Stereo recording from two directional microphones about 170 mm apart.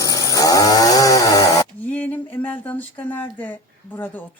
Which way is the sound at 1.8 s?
10° left (ahead or behind).